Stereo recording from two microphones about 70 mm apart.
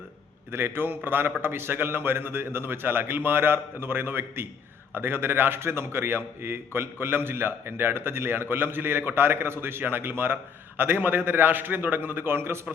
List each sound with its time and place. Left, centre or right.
0.5 s a man's voice: right